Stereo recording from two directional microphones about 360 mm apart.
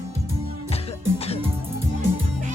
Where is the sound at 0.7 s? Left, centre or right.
Centre.